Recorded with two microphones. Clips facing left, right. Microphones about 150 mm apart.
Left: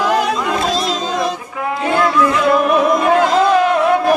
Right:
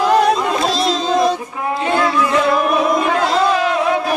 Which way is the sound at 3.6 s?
50° left (ahead or behind).